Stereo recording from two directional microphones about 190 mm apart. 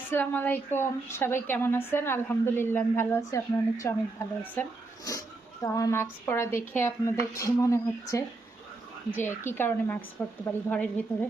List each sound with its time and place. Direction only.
0.1 s a woman's voice: 10° left (ahead or behind)
5.6 s a woman's voice: 20° left (ahead or behind)
9.5 s a woman's voice: 10° left (ahead or behind)